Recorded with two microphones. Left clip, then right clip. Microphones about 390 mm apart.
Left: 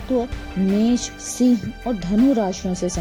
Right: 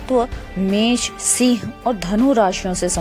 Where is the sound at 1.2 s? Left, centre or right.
Right.